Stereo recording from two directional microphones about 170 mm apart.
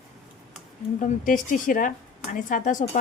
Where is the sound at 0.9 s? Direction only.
55° left (ahead or behind).